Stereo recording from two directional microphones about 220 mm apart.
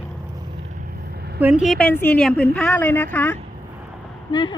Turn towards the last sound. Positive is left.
turn(degrees=20)  # may be behind; listen again after turning